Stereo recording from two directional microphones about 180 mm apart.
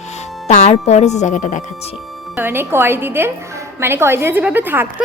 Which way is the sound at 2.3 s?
10° right (ahead or behind).